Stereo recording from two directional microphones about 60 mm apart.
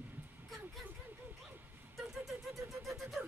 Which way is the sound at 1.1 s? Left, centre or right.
Right.